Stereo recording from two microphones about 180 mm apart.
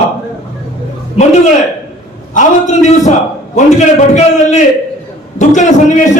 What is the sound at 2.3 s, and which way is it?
A man's voice, 45° left (ahead or behind).